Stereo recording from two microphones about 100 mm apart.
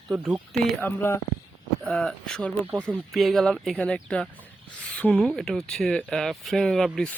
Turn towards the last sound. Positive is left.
turn(degrees=5)  # may be behind; listen again after turning